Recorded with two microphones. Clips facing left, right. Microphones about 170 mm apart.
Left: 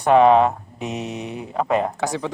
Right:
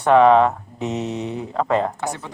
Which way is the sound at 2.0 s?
90° left.